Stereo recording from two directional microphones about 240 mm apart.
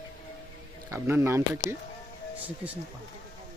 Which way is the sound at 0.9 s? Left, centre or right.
Centre.